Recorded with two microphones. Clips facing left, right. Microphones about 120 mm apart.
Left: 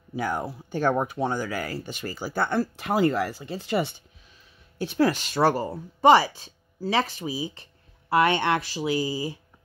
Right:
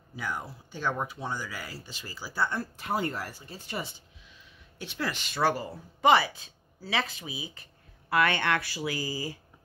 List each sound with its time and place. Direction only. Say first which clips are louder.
0.1 s speech: left 8 dB; 55° left (ahead or behind); by 3.9 s 90° left
4.7 s speech: left 11 dB; 45° left (ahead or behind)
8.1 s speech: left 5 dB; 20° left (ahead or behind)